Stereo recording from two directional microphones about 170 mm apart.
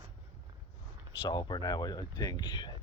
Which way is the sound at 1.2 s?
25° left (ahead or behind).